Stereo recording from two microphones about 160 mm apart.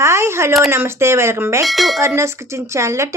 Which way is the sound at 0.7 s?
15° right (ahead or behind).